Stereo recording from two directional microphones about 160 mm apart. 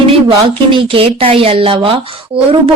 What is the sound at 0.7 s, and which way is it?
A woman's voice, 35° right (ahead or behind).